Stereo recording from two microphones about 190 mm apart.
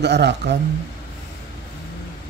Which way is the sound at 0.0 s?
65° right (ahead or behind).